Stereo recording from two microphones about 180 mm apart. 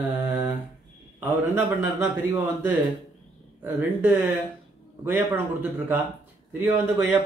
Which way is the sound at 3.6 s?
10° right (ahead or behind).